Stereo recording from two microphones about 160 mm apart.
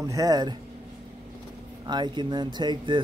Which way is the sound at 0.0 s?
20° right (ahead or behind).